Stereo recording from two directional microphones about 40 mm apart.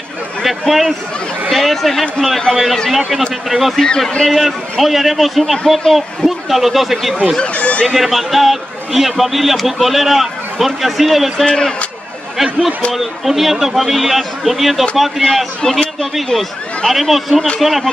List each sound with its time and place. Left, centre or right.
0.4 s a man's voice: centre
7.5 s a sound: left
7.9 s a man's voice: centre
11.4 s speech: centre
12.9 s a man's voice: centre
15.2 s a man's voice: centre